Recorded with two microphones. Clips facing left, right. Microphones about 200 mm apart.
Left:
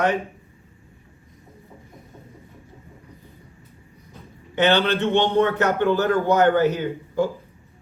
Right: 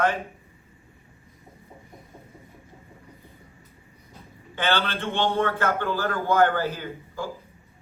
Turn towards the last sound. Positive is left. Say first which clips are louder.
# left 11 dB
turn(degrees=20)  # may be behind; listen again after turning